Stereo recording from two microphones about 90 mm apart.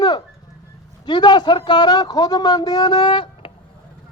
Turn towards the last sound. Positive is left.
turn(degrees=65)  # may be behind; listen again after turning